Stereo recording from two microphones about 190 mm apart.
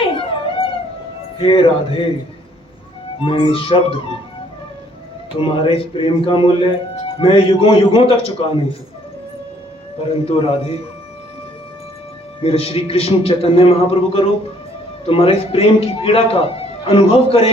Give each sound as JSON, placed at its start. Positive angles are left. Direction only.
{"t": 0.2, "sound": "a sound", "side_deg": 30}
{"t": 1.4, "sound": "speech", "side_deg": 25}
{"t": 3.2, "sound": "speech", "side_deg": 25}
{"t": 5.4, "sound": "speech", "side_deg": 30}
{"t": 10.2, "sound": "speech", "side_deg": 30}
{"t": 12.4, "sound": "speech", "side_deg": 30}